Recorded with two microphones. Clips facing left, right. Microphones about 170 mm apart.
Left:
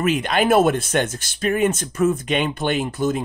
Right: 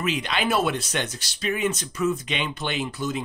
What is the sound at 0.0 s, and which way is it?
Speech, 50° left (ahead or behind).